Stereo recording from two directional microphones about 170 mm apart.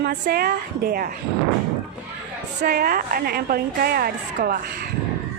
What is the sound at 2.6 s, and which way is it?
A woman's voice, 65° right (ahead or behind).